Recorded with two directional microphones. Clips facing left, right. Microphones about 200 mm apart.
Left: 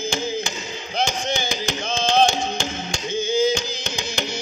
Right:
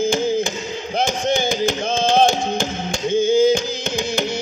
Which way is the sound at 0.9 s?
55° right (ahead or behind).